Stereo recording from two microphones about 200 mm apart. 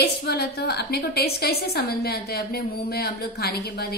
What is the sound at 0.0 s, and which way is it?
A woman's voice, 55° left (ahead or behind).